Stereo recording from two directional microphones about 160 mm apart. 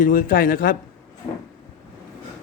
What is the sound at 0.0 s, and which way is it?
Speech, 60° left (ahead or behind).